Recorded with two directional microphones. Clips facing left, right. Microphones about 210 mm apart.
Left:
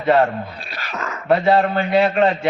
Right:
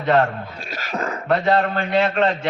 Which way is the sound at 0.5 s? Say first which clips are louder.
Right 3 dB; 45° right (ahead or behind).